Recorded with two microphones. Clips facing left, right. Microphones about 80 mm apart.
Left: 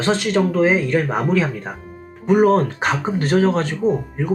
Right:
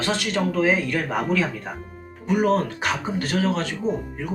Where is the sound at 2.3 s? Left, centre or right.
Left.